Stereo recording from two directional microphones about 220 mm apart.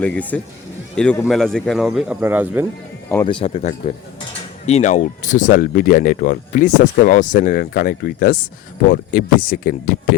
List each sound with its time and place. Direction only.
0.0 s speech: 5° left (ahead or behind)
3.2 s speech: 25° left (ahead or behind); by 10.2 s 40° left (ahead or behind)